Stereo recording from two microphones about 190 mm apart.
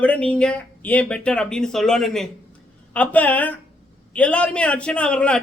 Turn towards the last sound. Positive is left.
turn(degrees=5)  # may be behind; listen again after turning